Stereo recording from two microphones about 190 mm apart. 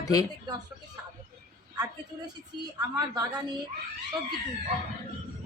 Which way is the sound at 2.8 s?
20° right (ahead or behind).